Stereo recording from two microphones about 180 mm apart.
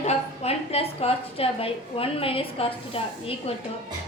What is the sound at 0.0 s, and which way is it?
A woman's voice, 35° left (ahead or behind).